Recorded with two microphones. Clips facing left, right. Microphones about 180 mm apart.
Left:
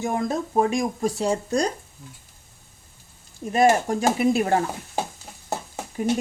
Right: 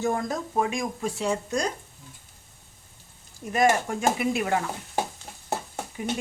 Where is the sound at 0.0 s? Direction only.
20° left (ahead or behind).